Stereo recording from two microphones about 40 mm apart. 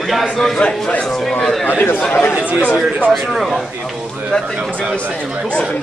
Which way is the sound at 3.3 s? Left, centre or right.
Centre.